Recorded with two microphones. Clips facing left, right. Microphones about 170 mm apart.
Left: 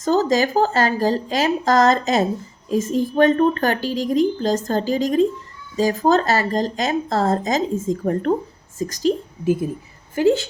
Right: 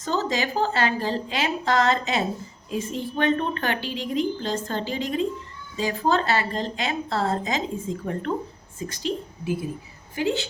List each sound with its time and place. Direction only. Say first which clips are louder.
0.0 s a woman's voice: left 8 dB; 45° left (ahead or behind)